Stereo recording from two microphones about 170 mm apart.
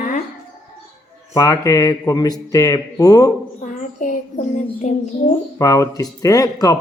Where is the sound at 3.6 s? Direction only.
50° left (ahead or behind).